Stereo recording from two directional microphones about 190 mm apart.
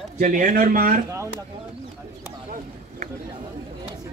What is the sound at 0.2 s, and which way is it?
Speech, 45° right (ahead or behind).